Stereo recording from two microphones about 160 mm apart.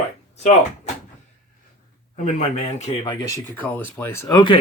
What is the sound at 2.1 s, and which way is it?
Speech, 45° left (ahead or behind).